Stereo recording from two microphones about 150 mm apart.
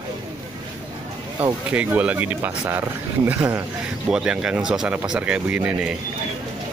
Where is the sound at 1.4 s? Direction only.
10° right (ahead or behind).